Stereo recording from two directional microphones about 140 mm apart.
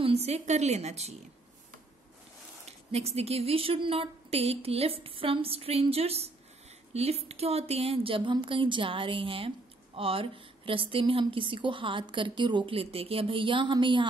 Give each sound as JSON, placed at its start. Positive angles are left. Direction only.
{"t": 0.0, "sound": "a woman's voice", "side_deg": -45}
{"t": 2.9, "sound": "a woman's voice", "side_deg": -50}